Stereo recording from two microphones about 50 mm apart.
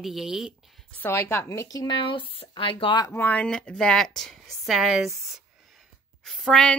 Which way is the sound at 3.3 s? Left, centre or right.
Centre.